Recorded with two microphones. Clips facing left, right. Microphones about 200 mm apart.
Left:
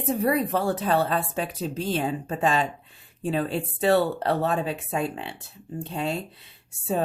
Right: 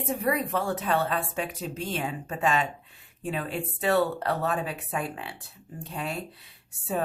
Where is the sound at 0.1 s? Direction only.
35° left (ahead or behind).